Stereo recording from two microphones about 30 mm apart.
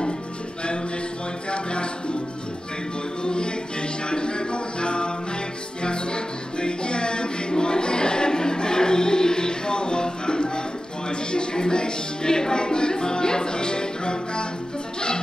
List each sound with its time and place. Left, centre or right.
1.5 s music: left
4.1 s music: left